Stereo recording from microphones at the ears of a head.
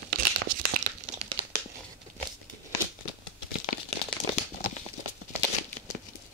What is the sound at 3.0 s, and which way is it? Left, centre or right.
Crumpling, left.